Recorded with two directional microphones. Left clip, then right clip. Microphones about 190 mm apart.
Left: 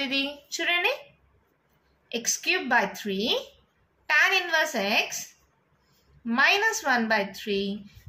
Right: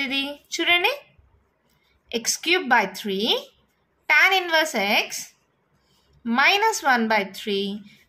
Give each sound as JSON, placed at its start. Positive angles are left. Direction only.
{"t": 0.0, "sound": "a woman's voice", "side_deg": -35}
{"t": 2.0, "sound": "a woman's voice", "side_deg": -45}